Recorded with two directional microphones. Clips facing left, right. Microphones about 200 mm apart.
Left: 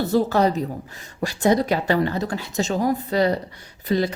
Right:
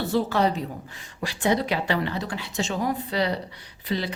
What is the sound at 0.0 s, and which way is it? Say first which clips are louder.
A woman's voice: left 4 dB; 40° left (ahead or behind).